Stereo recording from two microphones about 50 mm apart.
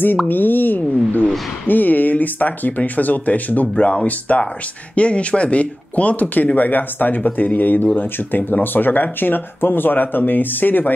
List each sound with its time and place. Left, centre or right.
0.3 s speech: left